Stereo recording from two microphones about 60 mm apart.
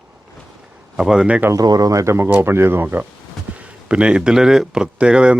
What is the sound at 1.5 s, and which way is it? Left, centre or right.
Speech, right.